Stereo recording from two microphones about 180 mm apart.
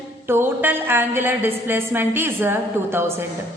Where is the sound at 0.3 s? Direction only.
10° right (ahead or behind).